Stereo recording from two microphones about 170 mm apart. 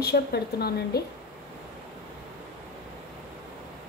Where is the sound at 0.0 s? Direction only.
70° left (ahead or behind).